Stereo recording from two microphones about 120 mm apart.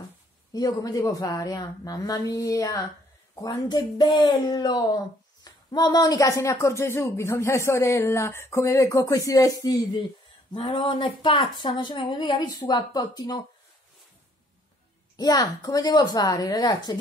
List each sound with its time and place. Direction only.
0.5 s a woman's voice: 30° left (ahead or behind)
10.5 s a woman's voice: 45° left (ahead or behind)
15.1 s a woman's voice: 30° left (ahead or behind)